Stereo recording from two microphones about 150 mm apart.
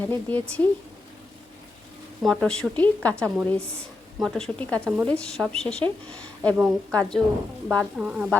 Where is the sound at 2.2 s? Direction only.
5° left (ahead or behind).